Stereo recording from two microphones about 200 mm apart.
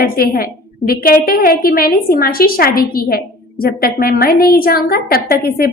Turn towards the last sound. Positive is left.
turn(degrees=50)  # may be behind; listen again after turning